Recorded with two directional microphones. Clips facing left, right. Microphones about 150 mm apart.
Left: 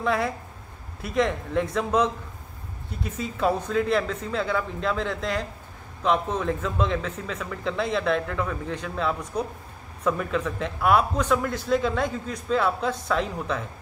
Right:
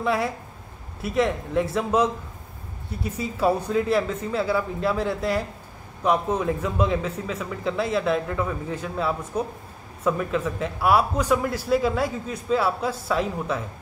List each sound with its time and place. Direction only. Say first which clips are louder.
0.0 s a man's voice: right 1 dB; 5° right (ahead or behind)